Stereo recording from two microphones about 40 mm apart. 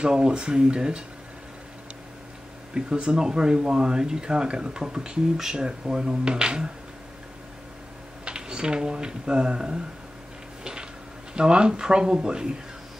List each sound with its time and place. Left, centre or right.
0.0 s speech: right
2.7 s speech: right
8.3 s speech: right
10.6 s a sound: right
11.3 s speech: right